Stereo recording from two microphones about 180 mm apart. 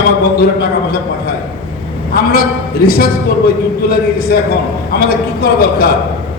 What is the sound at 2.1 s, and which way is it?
Speech, 55° left (ahead or behind).